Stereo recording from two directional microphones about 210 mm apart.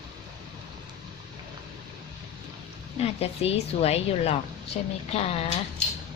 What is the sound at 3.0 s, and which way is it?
A woman's voice, 30° left (ahead or behind).